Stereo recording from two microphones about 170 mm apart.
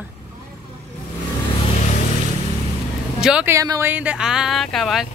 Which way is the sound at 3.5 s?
20° right (ahead or behind).